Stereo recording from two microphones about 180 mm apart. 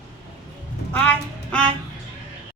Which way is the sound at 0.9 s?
10° left (ahead or behind).